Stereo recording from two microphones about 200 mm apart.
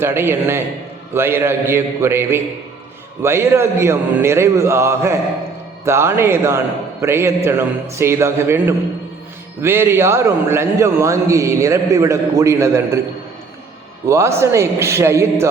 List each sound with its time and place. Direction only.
0.0 s a man's voice: 10° right (ahead or behind)
14.1 s a man's voice: 15° right (ahead or behind)